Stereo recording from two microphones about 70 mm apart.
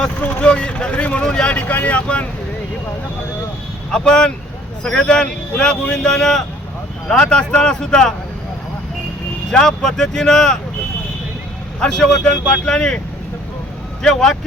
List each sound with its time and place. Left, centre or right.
0.2 s speech: centre
1.5 s speech: left
3.9 s speech: centre
9.5 s speech: centre
11.8 s speech: centre
14.0 s speech: centre